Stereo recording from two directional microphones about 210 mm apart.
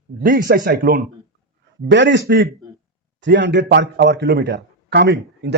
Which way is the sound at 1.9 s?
60° right (ahead or behind).